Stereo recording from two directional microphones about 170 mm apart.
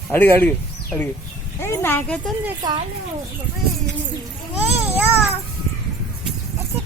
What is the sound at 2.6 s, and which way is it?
Speech, 20° right (ahead or behind).